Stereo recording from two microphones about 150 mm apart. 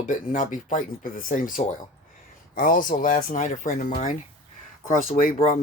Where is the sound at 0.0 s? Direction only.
60° left (ahead or behind).